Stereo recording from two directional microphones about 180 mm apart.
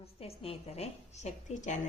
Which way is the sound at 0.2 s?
35° left (ahead or behind).